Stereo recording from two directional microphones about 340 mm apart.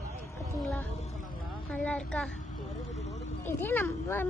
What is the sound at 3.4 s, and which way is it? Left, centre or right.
Speech, centre.